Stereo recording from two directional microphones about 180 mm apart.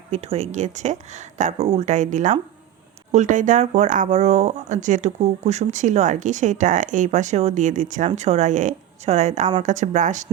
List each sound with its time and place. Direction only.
0.1 s speech: 35° right (ahead or behind)